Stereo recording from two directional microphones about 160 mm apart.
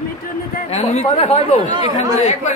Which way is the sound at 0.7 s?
40° left (ahead or behind).